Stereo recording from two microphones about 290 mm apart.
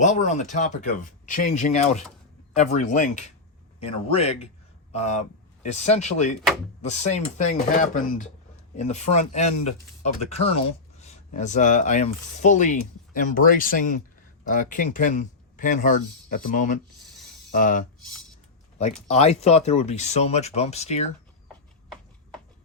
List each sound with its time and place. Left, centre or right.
0.0 s speech: left
19.1 s speech: left